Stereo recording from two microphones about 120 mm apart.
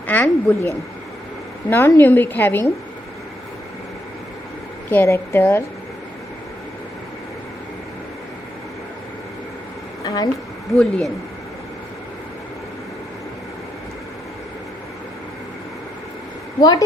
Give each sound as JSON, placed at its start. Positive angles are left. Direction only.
{"t": 0.1, "sound": "a woman's voice", "side_deg": 15}
{"t": 1.7, "sound": "a woman's voice", "side_deg": 15}
{"t": 4.9, "sound": "a woman's voice", "side_deg": 20}
{"t": 10.0, "sound": "a sound", "side_deg": 30}
{"t": 10.8, "sound": "a woman's voice", "side_deg": 5}
{"t": 16.6, "sound": "a woman's voice", "side_deg": 35}